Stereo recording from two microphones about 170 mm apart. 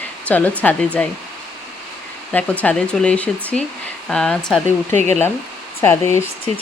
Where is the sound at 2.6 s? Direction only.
5° left (ahead or behind).